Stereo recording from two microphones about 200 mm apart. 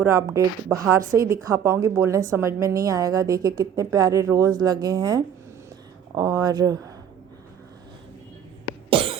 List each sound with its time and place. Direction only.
0.0 s speech: 15° right (ahead or behind)
8.6 s cough: 25° right (ahead or behind)